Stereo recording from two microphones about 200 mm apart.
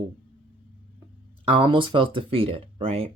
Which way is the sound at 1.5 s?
25° right (ahead or behind).